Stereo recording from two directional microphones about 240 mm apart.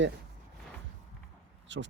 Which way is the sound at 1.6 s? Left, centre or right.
Right.